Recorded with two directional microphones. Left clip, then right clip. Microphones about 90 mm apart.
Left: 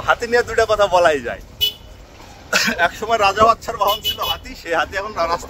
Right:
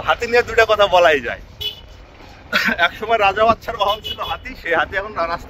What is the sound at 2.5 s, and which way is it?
Speech, 40° left (ahead or behind).